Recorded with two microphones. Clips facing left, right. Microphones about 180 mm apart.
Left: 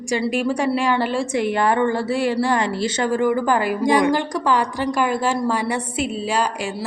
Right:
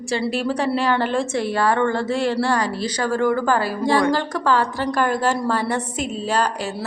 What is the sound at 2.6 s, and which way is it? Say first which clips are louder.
Speech: left 2 dB; 25° left (ahead or behind).